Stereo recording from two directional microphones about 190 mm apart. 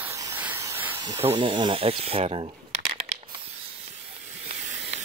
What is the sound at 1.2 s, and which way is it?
Speech, 25° right (ahead or behind).